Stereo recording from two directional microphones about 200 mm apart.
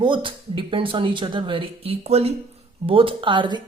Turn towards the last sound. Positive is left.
turn(degrees=-25)  # may be behind; listen again after turning